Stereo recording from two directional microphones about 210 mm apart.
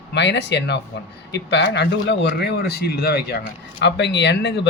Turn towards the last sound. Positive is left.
turn(degrees=55)  # may be behind; listen again after turning